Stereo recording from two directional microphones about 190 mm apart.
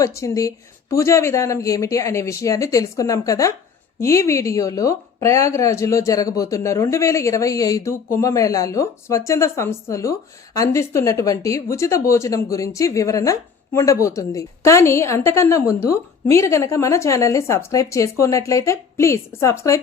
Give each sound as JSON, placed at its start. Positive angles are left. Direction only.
{"t": 0.0, "sound": "a woman's voice", "side_deg": 15}